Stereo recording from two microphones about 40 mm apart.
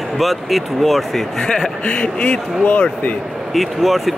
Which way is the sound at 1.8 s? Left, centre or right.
Left.